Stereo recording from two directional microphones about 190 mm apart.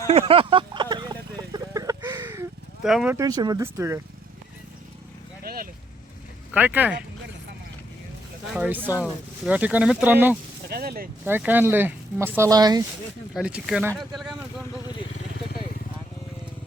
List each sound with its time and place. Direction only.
0.1 s a sound: 30° right (ahead or behind)
1.5 s chicken: 20° right (ahead or behind)
2.8 s speech: 5° right (ahead or behind)
5.4 s vehicle: 50° right (ahead or behind)
6.5 s speech: 5° right (ahead or behind)
8.5 s speech: 10° right (ahead or behind)
10.7 s speech: 55° right (ahead or behind)
11.3 s speech: 10° right (ahead or behind)
13.3 s speech: 5° right (ahead or behind)